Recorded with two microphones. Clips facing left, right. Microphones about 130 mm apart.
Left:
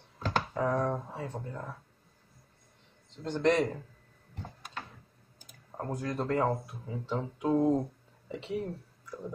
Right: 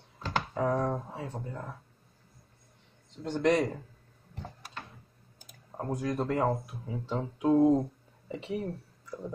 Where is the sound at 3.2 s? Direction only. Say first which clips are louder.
Even; 15° right (ahead or behind).